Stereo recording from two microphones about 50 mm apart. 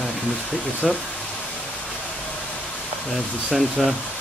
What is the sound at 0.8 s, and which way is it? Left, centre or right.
Speech, centre.